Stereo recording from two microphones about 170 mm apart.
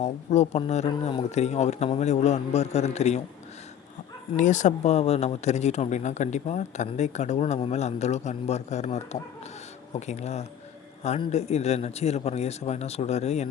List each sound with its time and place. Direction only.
0.0 s speech: 40° left (ahead or behind)
4.4 s speech: 45° left (ahead or behind)